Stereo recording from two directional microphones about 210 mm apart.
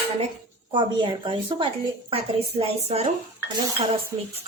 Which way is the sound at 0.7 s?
20° right (ahead or behind).